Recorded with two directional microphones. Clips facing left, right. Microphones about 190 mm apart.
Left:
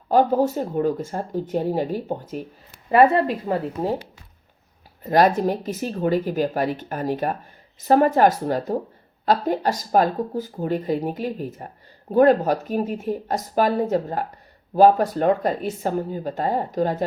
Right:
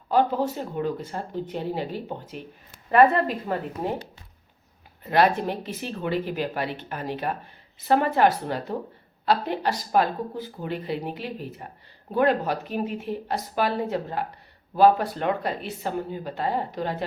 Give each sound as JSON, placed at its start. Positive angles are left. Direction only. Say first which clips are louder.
{"t": 0.1, "sound": "speech", "louder": "left 5 dB", "side_deg": 45}
{"t": 2.9, "sound": "speech", "louder": "left 2 dB", "side_deg": 30}
{"t": 5.0, "sound": "speech", "louder": "left 4 dB", "side_deg": 40}